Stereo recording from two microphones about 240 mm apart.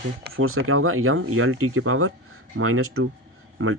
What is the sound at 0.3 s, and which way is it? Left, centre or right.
A man's voice, right.